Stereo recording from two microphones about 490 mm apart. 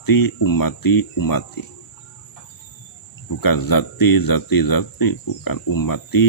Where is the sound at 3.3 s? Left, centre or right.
Left.